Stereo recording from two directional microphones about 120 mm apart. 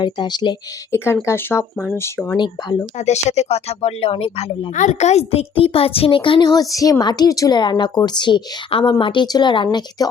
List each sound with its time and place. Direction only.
0.0 s a woman's voice: 40° left (ahead or behind)
0.9 s speech: 20° left (ahead or behind)
2.3 s a woman's voice: 35° left (ahead or behind)
3.0 s speech: 70° left (ahead or behind); by 4.7 s 55° left (ahead or behind)
4.7 s a child's voice: 80° left; by 6.4 s 45° left (ahead or behind)
6.4 s a woman's voice: 30° left (ahead or behind)